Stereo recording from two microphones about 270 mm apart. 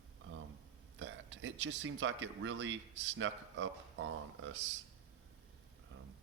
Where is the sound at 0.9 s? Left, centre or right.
Right.